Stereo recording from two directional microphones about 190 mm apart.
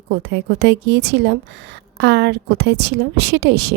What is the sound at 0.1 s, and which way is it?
A woman's voice, 65° right (ahead or behind).